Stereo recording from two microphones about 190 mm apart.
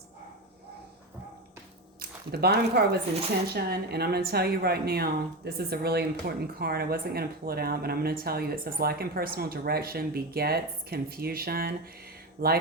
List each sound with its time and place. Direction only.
2.0 s a woman's voice: 55° right (ahead or behind)